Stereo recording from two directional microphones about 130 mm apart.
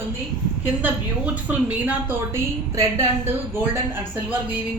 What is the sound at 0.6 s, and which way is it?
A woman's voice, 10° right (ahead or behind).